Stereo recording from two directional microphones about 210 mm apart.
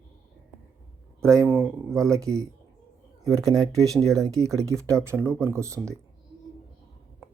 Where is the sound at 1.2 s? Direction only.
15° right (ahead or behind).